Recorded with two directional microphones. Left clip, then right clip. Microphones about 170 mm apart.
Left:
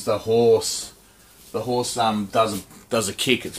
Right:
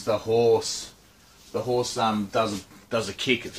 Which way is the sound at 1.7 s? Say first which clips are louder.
Left 3 dB; 30° left (ahead or behind).